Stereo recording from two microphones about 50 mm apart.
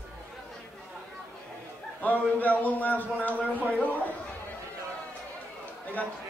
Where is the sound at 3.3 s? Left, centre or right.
Right.